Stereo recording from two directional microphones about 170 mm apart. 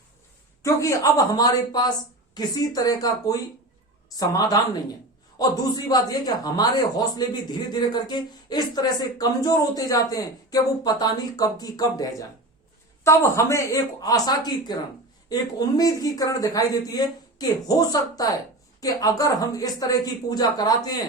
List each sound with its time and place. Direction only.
0.6 s a man's voice: 20° left (ahead or behind)